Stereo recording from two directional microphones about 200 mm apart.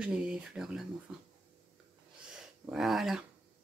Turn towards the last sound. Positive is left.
turn(degrees=0)  # may be behind; listen again after turning